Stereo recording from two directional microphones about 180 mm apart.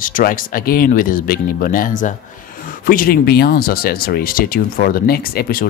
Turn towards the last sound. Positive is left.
turn(degrees=55)  # may be behind; listen again after turning